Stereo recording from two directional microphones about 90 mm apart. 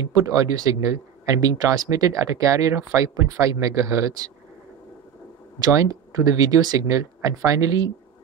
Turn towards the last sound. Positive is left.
turn(degrees=-40)  # may be behind; listen again after turning